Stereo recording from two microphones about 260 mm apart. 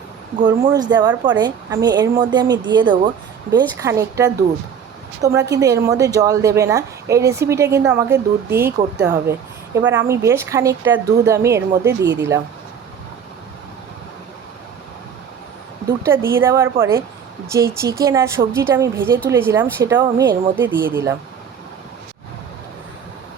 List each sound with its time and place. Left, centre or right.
0.4 s speech: centre
11.9 s speech: right
16.0 s speech: centre